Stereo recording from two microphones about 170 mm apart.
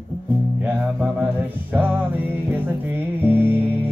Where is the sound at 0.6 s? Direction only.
10° right (ahead or behind).